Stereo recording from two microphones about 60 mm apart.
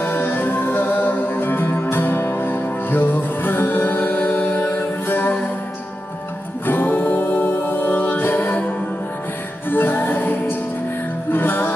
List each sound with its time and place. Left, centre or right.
0.0 s music: left
6.6 s music: left
9.7 s music: left